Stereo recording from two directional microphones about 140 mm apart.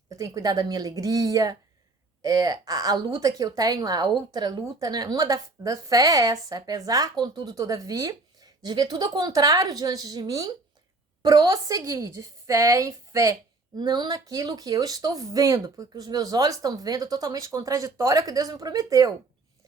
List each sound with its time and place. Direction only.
0.1 s a woman's voice: 25° right (ahead or behind)